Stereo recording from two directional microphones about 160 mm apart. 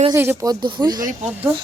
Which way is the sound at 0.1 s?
20° right (ahead or behind).